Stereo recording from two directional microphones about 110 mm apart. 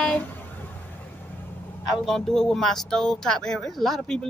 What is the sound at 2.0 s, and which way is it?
Speech, centre (ahead or behind).